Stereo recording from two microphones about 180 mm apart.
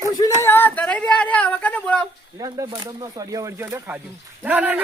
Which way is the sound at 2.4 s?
20° right (ahead or behind).